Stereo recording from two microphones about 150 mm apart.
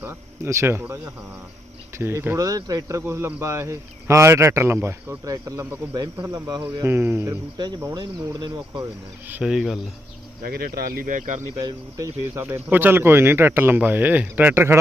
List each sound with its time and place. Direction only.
0.0 s a man's voice: 15° right (ahead or behind)
9.2 s speech: 10° right (ahead or behind)
10.4 s speech: 90° right; by 11.3 s 65° right (ahead or behind)
11.5 s speech: 25° right (ahead or behind)